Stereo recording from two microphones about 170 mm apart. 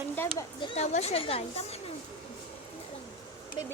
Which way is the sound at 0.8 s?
40° left (ahead or behind).